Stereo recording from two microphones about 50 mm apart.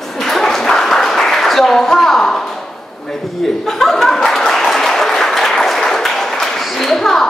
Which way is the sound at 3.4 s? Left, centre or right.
Centre.